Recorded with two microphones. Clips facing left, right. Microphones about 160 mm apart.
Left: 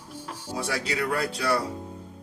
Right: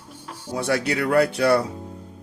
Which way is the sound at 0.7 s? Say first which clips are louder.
Right 8 dB; 60° right (ahead or behind).